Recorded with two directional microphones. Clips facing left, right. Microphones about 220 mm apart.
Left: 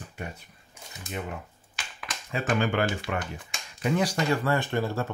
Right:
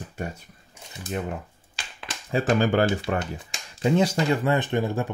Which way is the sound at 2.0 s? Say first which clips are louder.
Right 6 dB; 30° right (ahead or behind).